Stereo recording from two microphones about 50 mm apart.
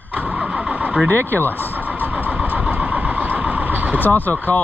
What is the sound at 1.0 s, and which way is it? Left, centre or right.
Speech, right.